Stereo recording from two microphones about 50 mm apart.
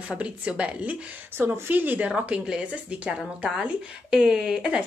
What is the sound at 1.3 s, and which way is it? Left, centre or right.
Speech, right.